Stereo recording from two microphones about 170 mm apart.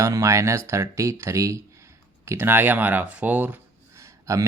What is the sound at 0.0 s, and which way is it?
Speech, 15° right (ahead or behind).